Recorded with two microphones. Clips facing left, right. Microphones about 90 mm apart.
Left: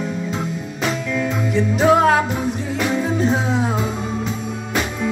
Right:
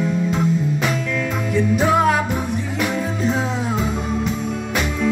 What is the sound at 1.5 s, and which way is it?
Music, 30° left (ahead or behind).